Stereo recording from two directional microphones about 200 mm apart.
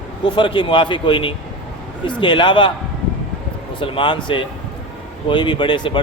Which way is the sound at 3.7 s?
25° left (ahead or behind).